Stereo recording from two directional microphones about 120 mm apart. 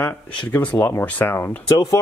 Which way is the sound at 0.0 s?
15° left (ahead or behind).